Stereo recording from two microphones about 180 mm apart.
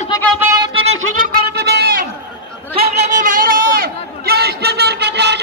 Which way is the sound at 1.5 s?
65° right (ahead or behind).